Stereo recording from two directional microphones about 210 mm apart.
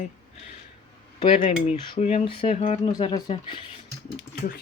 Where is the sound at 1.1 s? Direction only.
25° left (ahead or behind).